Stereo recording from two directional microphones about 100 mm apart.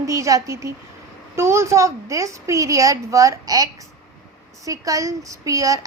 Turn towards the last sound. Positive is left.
turn(degrees=-35)  # may be behind; listen again after turning